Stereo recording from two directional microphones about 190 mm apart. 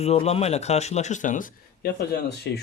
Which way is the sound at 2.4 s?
60° left (ahead or behind).